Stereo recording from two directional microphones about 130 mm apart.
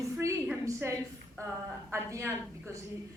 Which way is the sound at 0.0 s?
25° right (ahead or behind).